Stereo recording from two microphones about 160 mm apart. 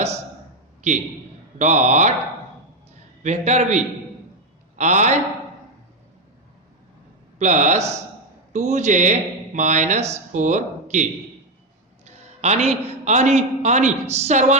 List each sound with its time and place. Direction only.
1.5 s speech: 50° right (ahead or behind)
3.2 s speech: 45° right (ahead or behind)
7.3 s speech: 50° right (ahead or behind)
12.0 s a sound: 45° right (ahead or behind)
12.6 s speech: 45° right (ahead or behind)